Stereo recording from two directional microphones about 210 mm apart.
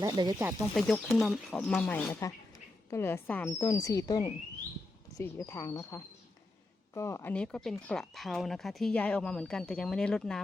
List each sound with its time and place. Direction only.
0.0 s speech: 20° right (ahead or behind)
0.7 s a woman's voice: centre (ahead or behind)